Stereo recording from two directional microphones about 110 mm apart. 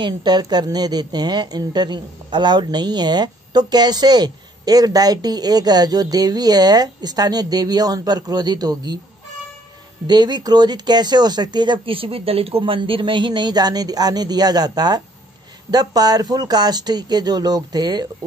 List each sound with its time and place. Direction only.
0.0 s a woman's voice: 40° right (ahead or behind)
10.0 s a woman's voice: 40° right (ahead or behind)